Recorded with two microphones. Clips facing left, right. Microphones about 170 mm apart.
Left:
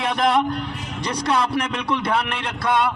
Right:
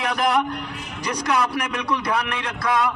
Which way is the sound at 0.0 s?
30° left (ahead or behind).